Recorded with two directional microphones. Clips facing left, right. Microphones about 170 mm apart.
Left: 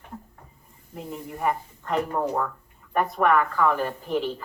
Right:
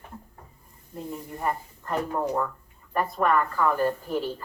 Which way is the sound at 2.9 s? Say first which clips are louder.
Left 2 dB; 75° left (ahead or behind).